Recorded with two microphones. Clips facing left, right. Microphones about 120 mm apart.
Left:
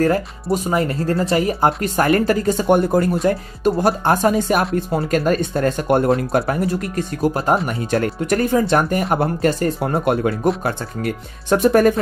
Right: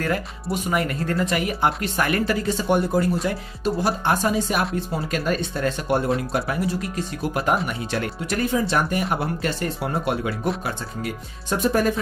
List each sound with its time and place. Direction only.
0.0 s speech: 35° left (ahead or behind); by 11.9 s 60° left (ahead or behind)